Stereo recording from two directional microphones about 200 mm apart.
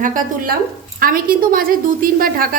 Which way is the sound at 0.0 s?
40° right (ahead or behind).